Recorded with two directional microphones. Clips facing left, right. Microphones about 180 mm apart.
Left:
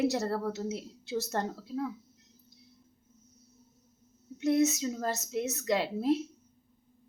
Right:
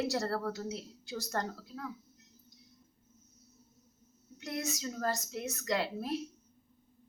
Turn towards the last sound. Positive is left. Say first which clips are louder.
# left 6 dB
turn(degrees=20)  # may be behind; listen again after turning